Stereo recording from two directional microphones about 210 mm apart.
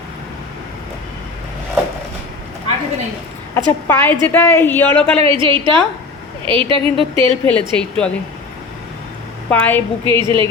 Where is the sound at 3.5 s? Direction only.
10° left (ahead or behind).